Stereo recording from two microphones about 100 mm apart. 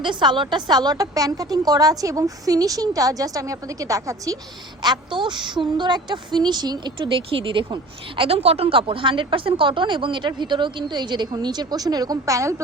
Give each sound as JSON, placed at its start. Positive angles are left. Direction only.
{"t": 0.0, "sound": "a woman's voice", "side_deg": -50}
{"t": 4.8, "sound": "speech", "side_deg": -50}
{"t": 7.3, "sound": "speech", "side_deg": -60}